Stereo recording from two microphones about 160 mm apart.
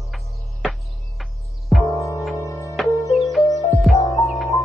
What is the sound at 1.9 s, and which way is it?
Music, 20° left (ahead or behind).